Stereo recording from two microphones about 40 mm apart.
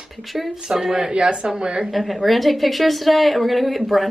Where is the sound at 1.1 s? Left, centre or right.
Right.